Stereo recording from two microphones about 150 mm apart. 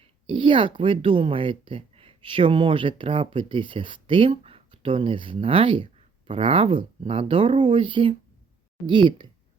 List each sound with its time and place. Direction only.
0.0 s speech: 35° right (ahead or behind)